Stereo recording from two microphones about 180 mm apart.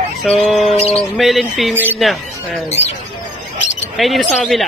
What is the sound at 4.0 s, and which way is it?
Speech, centre (ahead or behind).